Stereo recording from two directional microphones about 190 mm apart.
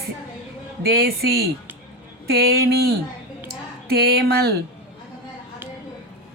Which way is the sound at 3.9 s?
55° right (ahead or behind).